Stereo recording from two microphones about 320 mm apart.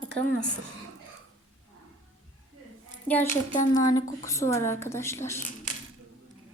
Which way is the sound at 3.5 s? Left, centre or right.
Left.